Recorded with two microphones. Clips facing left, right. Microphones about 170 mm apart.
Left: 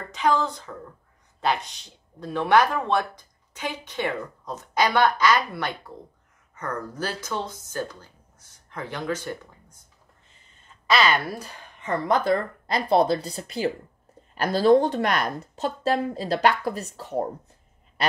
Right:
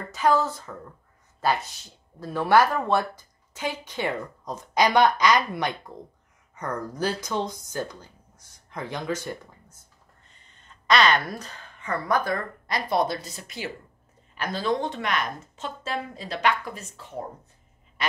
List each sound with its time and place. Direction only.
0.1 s speech: 5° right (ahead or behind)
10.9 s a woman's voice: 5° left (ahead or behind); by 17.3 s 40° left (ahead or behind)